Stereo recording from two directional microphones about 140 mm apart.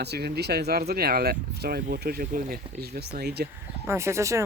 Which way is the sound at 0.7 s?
90° right.